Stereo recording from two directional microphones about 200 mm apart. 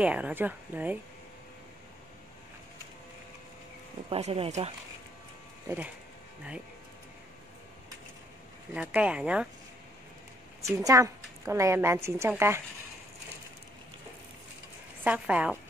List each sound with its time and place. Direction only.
0.0 s a woman's voice: 5° right (ahead or behind)
4.1 s speech: 30° right (ahead or behind)
8.7 s a woman's voice: 5° right (ahead or behind)
10.6 s a woman's voice: 15° right (ahead or behind)
15.0 s a woman's voice: 5° right (ahead or behind)